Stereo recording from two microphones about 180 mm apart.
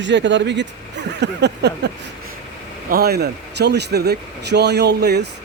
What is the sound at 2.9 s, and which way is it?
Speech, 60° right (ahead or behind).